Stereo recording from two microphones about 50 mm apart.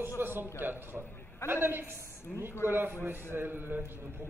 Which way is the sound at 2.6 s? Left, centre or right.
Right.